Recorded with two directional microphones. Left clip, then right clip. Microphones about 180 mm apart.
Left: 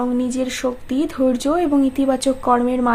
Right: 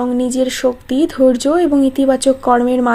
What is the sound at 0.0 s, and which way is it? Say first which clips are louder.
A woman's voice: right 5 dB; 30° right (ahead or behind).